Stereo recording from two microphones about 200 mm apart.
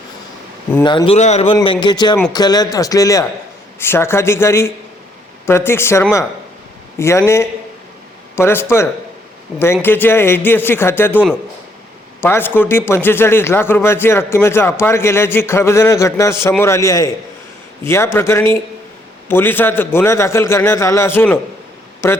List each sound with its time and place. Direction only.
0.7 s speech: 20° left (ahead or behind)
12.2 s speech: 10° left (ahead or behind)